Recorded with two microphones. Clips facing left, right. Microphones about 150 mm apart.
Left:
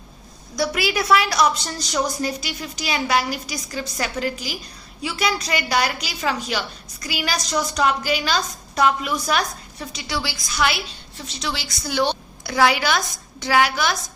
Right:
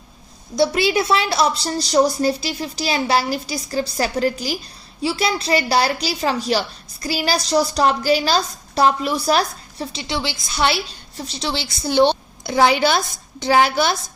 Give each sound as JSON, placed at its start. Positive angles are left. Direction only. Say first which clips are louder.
{"t": 0.5, "sound": "a woman's voice", "louder": "right 5 dB", "side_deg": -25}